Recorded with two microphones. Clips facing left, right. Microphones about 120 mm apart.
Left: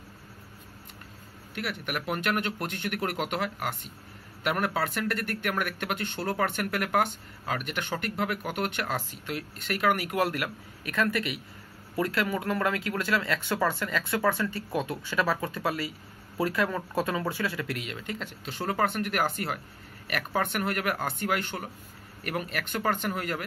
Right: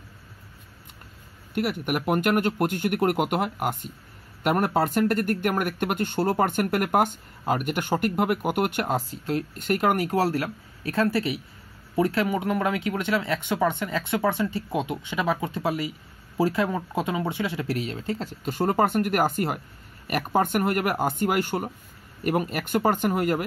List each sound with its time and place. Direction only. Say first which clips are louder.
1.5 s speech: right 8 dB; 45° right (ahead or behind)
8.8 s speech: right 6 dB; 35° right (ahead or behind)
18.4 s speech: right 6 dB; 50° right (ahead or behind)